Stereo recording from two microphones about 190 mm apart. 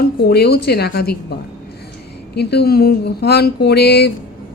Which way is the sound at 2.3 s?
55° left (ahead or behind).